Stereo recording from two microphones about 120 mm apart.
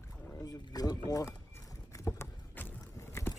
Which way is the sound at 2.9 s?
20° left (ahead or behind).